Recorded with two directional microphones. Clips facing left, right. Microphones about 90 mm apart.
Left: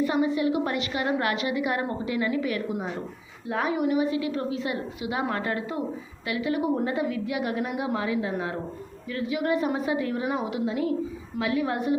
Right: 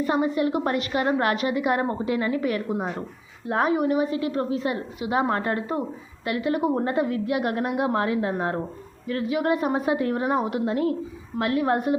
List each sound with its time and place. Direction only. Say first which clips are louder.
0.0 s a woman's voice: right 1 dB; 40° right (ahead or behind)